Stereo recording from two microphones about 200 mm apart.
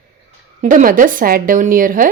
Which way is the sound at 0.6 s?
40° right (ahead or behind).